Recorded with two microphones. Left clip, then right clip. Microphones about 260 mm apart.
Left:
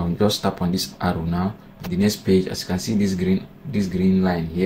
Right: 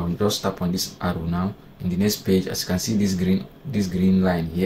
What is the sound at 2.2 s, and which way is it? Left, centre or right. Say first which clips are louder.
Speech: left 2 dB; centre.